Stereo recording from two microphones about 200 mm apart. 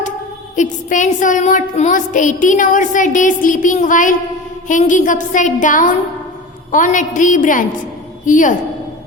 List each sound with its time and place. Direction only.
0.5 s a woman's voice: 40° left (ahead or behind)